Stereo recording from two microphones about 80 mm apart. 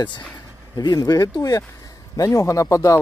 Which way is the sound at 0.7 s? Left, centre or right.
Left.